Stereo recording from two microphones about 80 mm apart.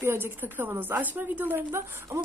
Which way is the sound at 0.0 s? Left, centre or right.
Right.